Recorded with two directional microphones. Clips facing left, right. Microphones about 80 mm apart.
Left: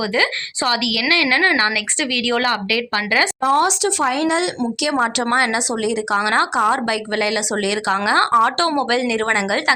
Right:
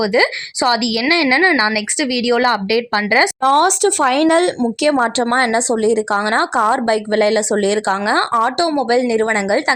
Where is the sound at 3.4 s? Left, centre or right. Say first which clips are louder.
Right 3 dB; right.